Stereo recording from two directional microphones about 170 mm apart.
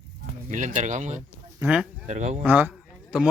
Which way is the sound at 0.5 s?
45° right (ahead or behind).